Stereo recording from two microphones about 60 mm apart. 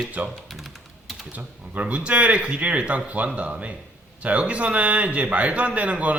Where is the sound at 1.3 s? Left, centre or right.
Right.